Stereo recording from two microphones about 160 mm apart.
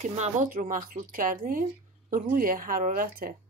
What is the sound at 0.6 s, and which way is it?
Speech, 60° right (ahead or behind).